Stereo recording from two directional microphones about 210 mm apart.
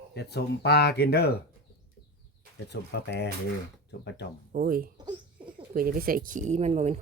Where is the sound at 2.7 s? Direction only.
50° left (ahead or behind).